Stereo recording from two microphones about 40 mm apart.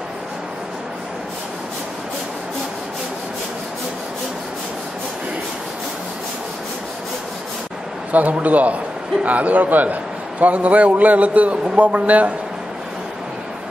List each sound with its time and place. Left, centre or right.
8.1 s a man's voice: right